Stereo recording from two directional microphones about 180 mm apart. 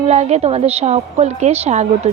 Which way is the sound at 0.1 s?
35° right (ahead or behind).